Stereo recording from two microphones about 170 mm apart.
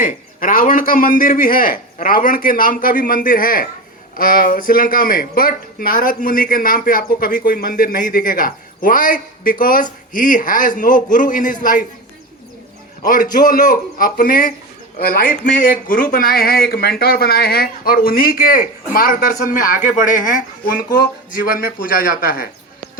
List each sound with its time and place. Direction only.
0.0 s a man's voice: 55° left (ahead or behind)
13.3 s speech: 50° left (ahead or behind)